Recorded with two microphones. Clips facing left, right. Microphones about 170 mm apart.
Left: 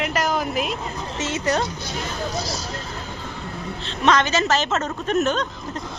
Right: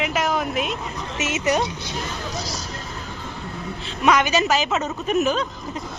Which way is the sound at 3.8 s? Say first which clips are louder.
Even; 10° right (ahead or behind).